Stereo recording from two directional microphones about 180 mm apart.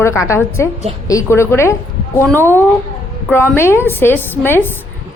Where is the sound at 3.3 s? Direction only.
10° left (ahead or behind).